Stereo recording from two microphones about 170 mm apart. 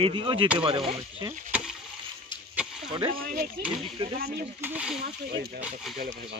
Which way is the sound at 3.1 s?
55° right (ahead or behind).